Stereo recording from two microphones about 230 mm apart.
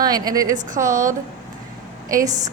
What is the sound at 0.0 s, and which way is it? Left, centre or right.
Speech, centre.